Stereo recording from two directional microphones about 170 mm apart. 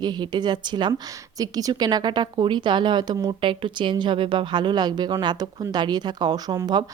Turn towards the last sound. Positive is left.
turn(degrees=-25)  # may be behind; listen again after turning